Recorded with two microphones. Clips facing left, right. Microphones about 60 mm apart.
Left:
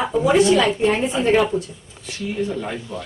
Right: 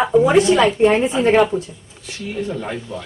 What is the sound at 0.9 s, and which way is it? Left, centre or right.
Speech, centre.